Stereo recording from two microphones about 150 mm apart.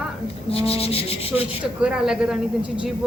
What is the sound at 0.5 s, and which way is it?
Rub, 40° left (ahead or behind).